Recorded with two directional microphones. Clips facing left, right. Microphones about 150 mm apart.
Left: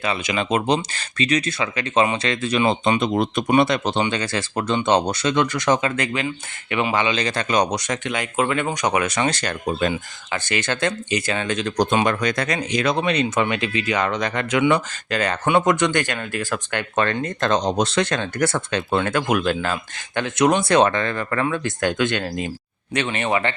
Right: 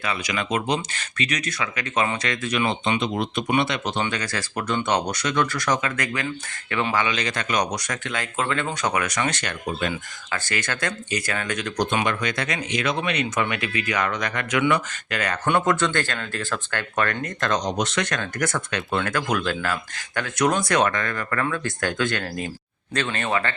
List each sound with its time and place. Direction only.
0.0 s speech: 25° left (ahead or behind)
3.9 s speech: 25° left (ahead or behind)
6.2 s speech: 15° left (ahead or behind); by 9.9 s 35° left (ahead or behind)
10.3 s speech: 20° left (ahead or behind)
15.4 s speech: 15° left (ahead or behind)